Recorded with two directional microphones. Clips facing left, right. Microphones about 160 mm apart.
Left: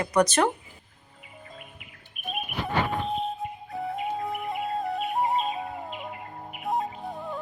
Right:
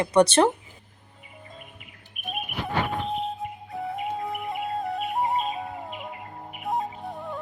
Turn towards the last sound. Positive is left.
turn(degrees=0)  # may be behind; listen again after turning